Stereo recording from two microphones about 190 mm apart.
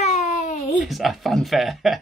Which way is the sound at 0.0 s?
40° left (ahead or behind).